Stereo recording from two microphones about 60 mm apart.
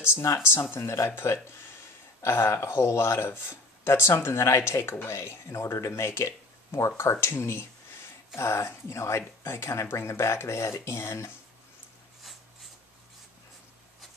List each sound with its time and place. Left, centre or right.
0.5 s speech: left